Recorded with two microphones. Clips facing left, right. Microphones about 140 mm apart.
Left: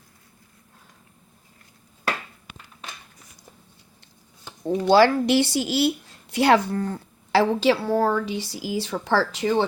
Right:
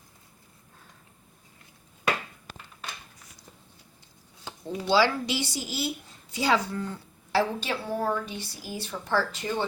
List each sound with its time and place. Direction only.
4.6 s a woman's voice: 50° left (ahead or behind)
7.3 s a woman's voice: 85° left